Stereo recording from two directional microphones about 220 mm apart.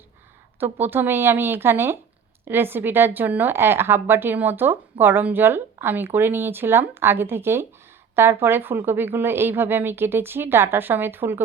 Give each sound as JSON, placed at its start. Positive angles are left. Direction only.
{"t": 0.6, "sound": "a woman's voice", "side_deg": -10}